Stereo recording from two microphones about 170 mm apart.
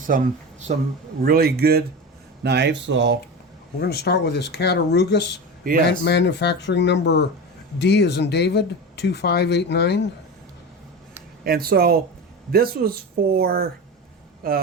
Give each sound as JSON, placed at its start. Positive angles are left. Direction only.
{"t": 0.1, "sound": "speech", "side_deg": -55}
{"t": 0.7, "sound": "speech", "side_deg": -40}
{"t": 1.2, "sound": "speech", "side_deg": -60}
{"t": 2.4, "sound": "speech", "side_deg": -85}
{"t": 3.8, "sound": "speech", "side_deg": 70}
{"t": 11.4, "sound": "speech", "side_deg": -60}